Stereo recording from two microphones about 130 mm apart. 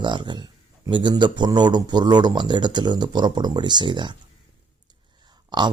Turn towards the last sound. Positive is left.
turn(degrees=-35)  # may be behind; listen again after turning